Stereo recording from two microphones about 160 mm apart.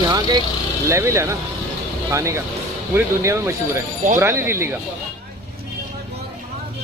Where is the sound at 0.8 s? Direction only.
15° right (ahead or behind).